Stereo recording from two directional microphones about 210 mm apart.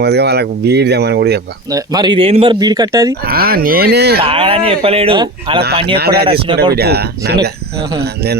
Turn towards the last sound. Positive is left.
turn(degrees=-50)  # may be behind; listen again after turning